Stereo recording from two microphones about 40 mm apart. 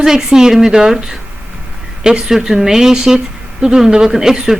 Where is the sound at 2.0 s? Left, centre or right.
Centre.